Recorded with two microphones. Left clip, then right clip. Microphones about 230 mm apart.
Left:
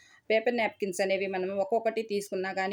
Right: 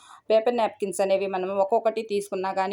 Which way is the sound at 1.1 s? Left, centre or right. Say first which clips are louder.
Right 5 dB; centre.